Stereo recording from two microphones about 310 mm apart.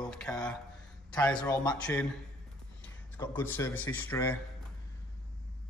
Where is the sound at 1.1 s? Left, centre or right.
Centre.